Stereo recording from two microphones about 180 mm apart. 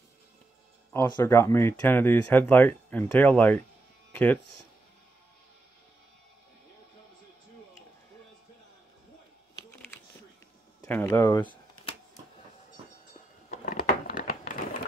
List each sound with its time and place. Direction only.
1.0 s speech: 20° left (ahead or behind)
4.1 s music: 10° left (ahead or behind)
9.7 s typing: 15° left (ahead or behind)
10.8 s speech: 15° left (ahead or behind)
13.5 s a sound: 55° left (ahead or behind)